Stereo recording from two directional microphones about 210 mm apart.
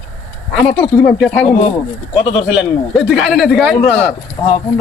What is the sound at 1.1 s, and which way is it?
Speech, 5° left (ahead or behind).